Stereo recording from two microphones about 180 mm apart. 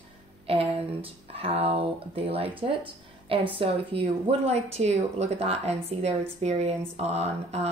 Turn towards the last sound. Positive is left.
turn(degrees=-35)  # may be behind; listen again after turning